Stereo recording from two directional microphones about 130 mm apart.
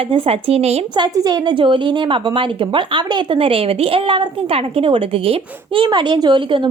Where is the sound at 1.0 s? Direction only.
35° right (ahead or behind).